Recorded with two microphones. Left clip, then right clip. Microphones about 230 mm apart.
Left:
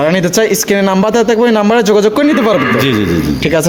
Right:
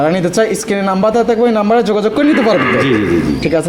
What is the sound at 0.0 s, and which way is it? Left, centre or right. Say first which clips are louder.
A man's voice: left 2 dB; left.